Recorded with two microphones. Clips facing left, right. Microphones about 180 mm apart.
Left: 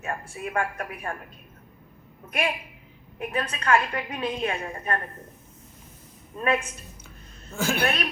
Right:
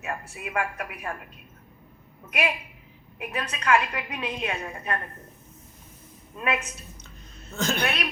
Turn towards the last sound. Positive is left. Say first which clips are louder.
# left 1 dB
turn(degrees=10)  # may be behind; listen again after turning